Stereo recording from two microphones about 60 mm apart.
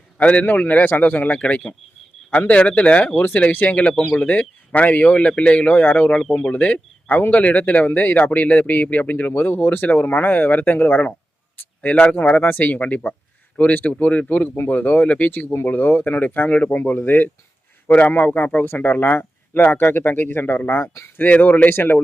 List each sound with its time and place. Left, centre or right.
0.2 s a man's voice: left
21.2 s a man's voice: left
21.7 s speech: left